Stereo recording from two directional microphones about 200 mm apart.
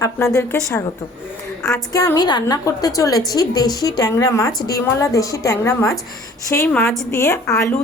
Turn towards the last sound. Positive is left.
turn(degrees=15)  # may be behind; listen again after turning